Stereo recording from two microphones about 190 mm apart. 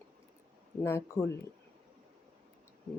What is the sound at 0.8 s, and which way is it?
Speech, 15° left (ahead or behind).